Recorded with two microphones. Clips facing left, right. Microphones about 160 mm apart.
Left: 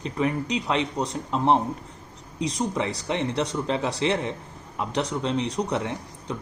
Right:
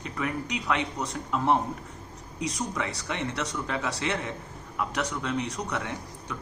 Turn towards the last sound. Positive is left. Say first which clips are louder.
# left 4 dB
turn(degrees=30)  # may be behind; listen again after turning